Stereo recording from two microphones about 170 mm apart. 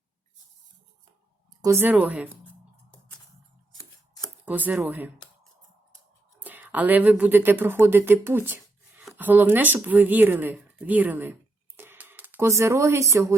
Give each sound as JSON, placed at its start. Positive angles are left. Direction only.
{"t": 1.6, "sound": "speech", "side_deg": -15}
{"t": 4.4, "sound": "speech", "side_deg": -10}
{"t": 6.4, "sound": "speech", "side_deg": -10}
{"t": 11.8, "sound": "a sound", "side_deg": -10}